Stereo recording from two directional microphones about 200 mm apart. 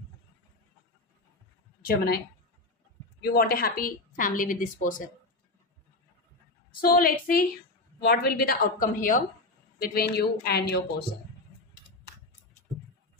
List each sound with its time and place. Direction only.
3.2 s a woman's voice: 50° left (ahead or behind)
6.8 s a woman's voice: 45° left (ahead or behind)